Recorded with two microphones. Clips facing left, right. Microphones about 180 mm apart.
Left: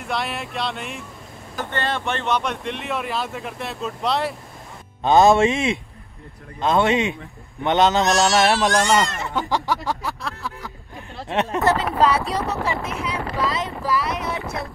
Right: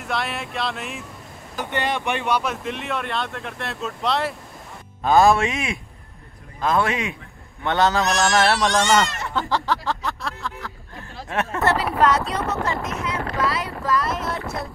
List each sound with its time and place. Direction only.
0.0 s speech: centre (ahead or behind)
1.6 s speech: 15° right (ahead or behind); by 4.4 s centre (ahead or behind)
5.0 s music: 25° left (ahead or behind)
8.6 s speech: centre (ahead or behind)
9.2 s a sound: 15° left (ahead or behind)
11.2 s music: 20° left (ahead or behind)
11.7 s speech: centre (ahead or behind)
12.3 s speech: 35° left (ahead or behind)
13.4 s speech: 20° left (ahead or behind)
13.9 s boat: centre (ahead or behind)